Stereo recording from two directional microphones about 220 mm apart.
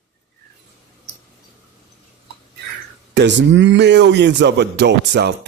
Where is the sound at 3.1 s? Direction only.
55° right (ahead or behind).